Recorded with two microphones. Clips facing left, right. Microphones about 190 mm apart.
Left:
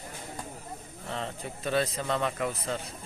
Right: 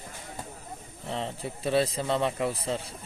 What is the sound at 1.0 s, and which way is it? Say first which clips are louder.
Speech: right 3 dB; 30° right (ahead or behind).